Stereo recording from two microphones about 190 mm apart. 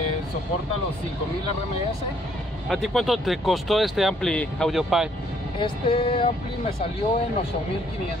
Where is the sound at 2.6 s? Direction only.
Centre (ahead or behind).